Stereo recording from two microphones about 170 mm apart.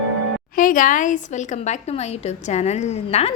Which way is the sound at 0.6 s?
50° left (ahead or behind).